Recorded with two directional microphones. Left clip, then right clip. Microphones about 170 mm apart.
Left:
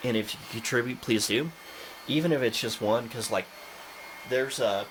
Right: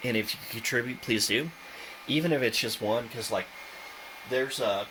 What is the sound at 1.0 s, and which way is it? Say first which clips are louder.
Speech: right 1 dB; 20° left (ahead or behind).